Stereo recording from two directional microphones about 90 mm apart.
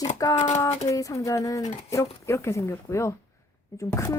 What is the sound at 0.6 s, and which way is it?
Speech, 40° left (ahead or behind).